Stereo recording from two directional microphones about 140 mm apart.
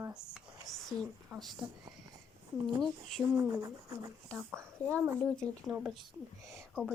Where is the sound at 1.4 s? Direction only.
Centre (ahead or behind).